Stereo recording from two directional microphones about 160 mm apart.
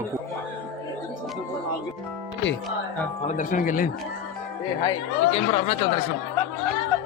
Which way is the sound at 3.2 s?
55° left (ahead or behind).